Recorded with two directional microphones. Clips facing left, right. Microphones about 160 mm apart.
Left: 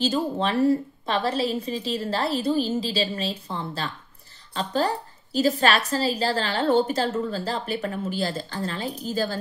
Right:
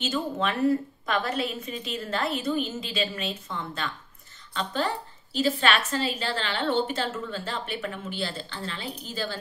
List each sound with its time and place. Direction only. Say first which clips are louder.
0.0 s a woman's voice: left 4 dB; 30° left (ahead or behind)